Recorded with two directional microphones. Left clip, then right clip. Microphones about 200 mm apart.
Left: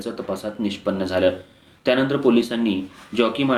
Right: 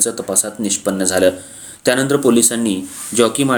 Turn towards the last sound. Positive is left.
turn(degrees=-45)  # may be behind; listen again after turning